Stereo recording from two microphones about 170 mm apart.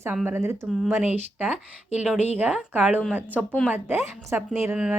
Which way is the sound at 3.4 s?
5° left (ahead or behind).